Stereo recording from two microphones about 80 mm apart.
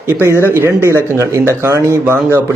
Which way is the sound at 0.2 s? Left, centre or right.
Right.